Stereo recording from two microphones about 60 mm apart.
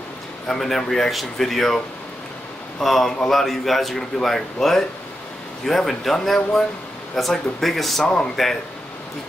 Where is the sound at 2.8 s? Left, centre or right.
Centre.